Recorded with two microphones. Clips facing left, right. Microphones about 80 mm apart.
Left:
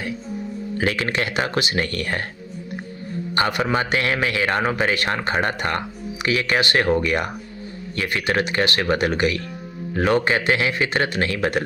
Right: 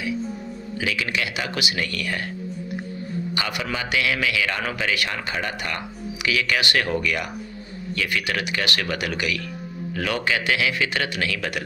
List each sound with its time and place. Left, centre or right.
0.8 s a man's voice: left
3.3 s a man's voice: left